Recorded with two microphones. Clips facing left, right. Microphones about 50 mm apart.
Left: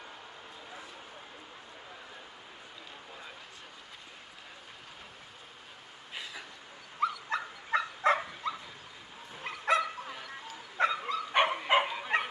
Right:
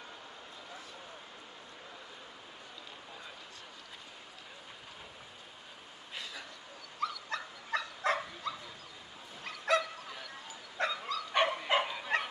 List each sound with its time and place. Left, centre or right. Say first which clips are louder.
7.0 s dog: left 5 dB; left
9.4 s bow-wow: left 2 dB; left
10.8 s dog: left 5 dB; left